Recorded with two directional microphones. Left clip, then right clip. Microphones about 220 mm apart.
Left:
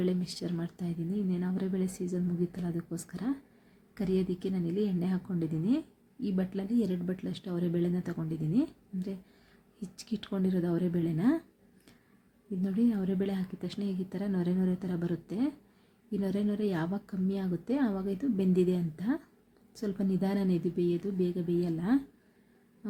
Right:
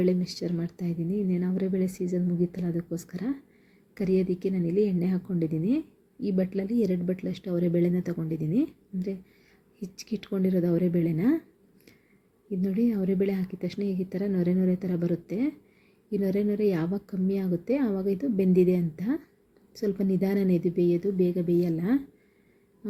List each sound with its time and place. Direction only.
0.0 s a woman's voice: 5° right (ahead or behind)
12.6 s a woman's voice: 5° right (ahead or behind)